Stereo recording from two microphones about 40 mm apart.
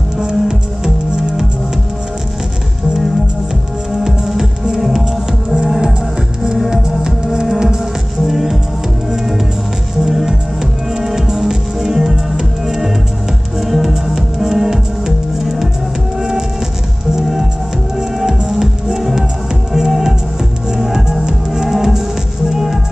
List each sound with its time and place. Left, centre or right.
0.2 s music: centre
4.0 s music: centre
6.5 s music: centre
10.1 s music: centre